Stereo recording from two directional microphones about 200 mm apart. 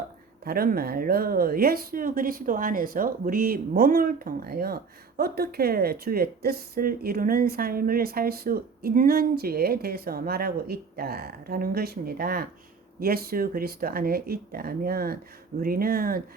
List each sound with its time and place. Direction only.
0.4 s speech: 50° right (ahead or behind)